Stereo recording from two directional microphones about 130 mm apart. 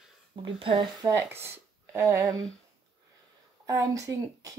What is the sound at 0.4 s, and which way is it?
Speech, 40° right (ahead or behind).